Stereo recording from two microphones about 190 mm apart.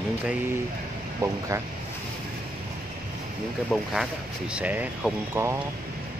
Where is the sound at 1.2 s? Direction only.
15° right (ahead or behind).